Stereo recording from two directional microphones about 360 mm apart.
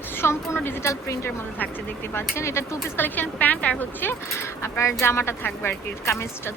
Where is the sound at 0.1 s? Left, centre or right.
Centre.